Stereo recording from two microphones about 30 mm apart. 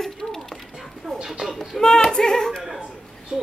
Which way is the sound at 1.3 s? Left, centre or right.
Centre.